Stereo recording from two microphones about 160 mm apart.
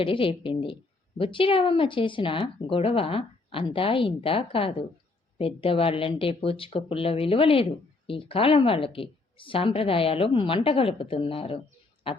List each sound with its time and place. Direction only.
0.0 s speech: 35° left (ahead or behind)